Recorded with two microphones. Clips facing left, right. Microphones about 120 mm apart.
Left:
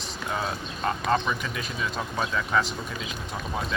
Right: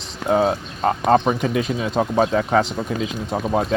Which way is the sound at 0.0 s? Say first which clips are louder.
Right 12 dB; 90° right.